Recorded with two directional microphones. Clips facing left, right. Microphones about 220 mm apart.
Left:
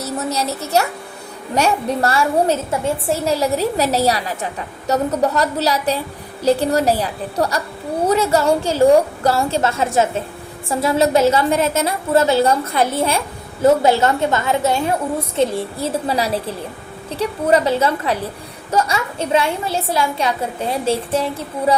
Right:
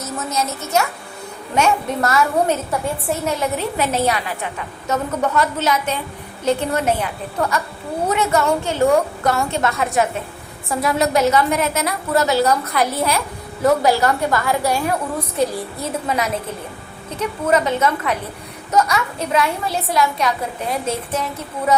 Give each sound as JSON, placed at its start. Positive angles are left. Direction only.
{"t": 0.0, "sound": "a woman's voice", "side_deg": 35}